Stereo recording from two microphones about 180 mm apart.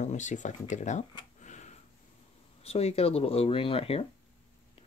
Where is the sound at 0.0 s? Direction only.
40° left (ahead or behind).